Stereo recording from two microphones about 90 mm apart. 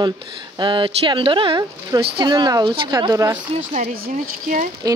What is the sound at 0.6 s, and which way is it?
Speech, 65° right (ahead or behind).